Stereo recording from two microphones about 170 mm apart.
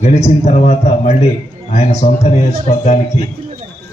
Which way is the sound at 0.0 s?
40° left (ahead or behind).